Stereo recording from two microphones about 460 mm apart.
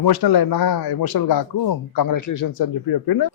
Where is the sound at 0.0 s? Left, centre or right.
Left.